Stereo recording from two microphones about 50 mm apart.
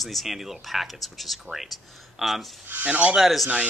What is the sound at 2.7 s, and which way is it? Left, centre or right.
Speech, right.